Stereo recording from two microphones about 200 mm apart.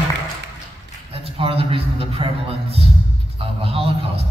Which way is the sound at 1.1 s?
30° right (ahead or behind).